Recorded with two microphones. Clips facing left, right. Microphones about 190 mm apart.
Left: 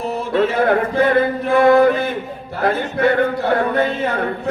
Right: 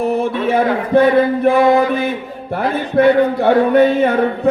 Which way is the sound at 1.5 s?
55° left (ahead or behind).